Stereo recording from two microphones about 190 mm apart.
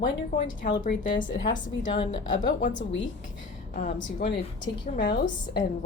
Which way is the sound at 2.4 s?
45° left (ahead or behind).